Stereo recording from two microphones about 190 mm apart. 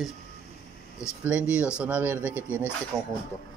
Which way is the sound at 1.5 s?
5° right (ahead or behind).